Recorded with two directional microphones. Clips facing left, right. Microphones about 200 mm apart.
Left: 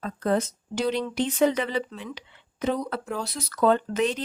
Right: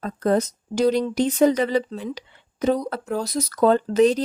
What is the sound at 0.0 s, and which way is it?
Speech, 40° right (ahead or behind).